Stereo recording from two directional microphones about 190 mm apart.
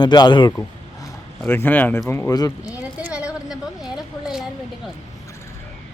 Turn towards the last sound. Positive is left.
turn(degrees=-5)  # may be behind; listen again after turning